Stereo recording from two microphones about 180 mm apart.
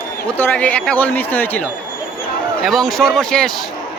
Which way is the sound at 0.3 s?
10° left (ahead or behind).